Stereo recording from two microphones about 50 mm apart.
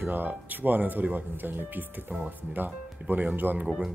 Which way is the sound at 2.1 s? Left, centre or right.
Right.